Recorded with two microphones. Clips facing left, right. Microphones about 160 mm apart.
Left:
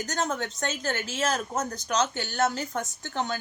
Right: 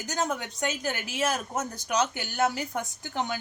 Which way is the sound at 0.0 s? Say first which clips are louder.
Left 1 dB; 10° right (ahead or behind).